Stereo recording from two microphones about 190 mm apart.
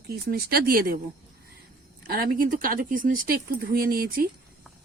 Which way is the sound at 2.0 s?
50° right (ahead or behind).